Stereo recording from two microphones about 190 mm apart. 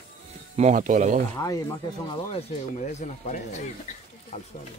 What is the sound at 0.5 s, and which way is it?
Speech, 40° right (ahead or behind).